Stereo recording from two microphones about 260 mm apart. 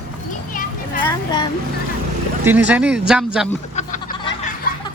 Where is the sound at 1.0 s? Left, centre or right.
Centre.